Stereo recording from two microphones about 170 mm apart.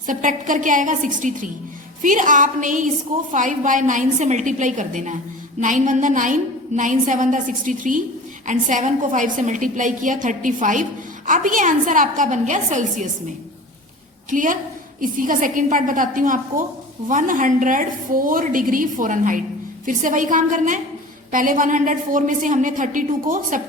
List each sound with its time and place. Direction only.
0.1 s a woman's voice: 50° right (ahead or behind)
14.3 s a woman's voice: 50° right (ahead or behind)